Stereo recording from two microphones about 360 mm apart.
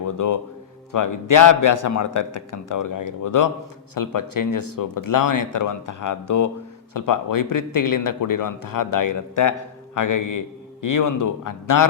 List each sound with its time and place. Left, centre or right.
0.0 s a man's voice: left